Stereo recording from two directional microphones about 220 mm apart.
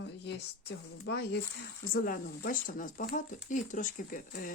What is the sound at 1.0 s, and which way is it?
Speech, 45° left (ahead or behind).